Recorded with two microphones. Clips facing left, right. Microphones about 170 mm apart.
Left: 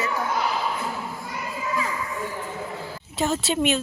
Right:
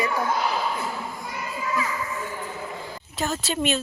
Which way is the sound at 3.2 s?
25° left (ahead or behind).